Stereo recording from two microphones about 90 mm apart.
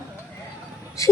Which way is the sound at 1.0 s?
35° left (ahead or behind).